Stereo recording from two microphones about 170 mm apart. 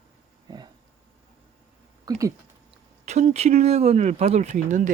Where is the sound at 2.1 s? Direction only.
20° right (ahead or behind).